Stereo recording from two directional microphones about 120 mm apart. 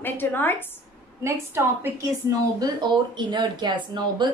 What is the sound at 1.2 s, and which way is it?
Speech, 25° right (ahead or behind).